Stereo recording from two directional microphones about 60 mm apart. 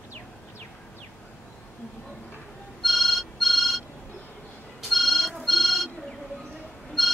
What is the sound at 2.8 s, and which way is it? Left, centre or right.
Telephone, centre.